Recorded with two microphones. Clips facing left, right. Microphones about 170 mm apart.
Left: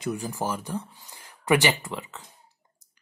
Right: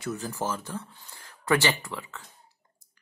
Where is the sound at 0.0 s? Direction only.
15° left (ahead or behind).